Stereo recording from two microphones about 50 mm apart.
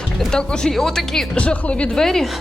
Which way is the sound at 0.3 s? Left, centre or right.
Centre.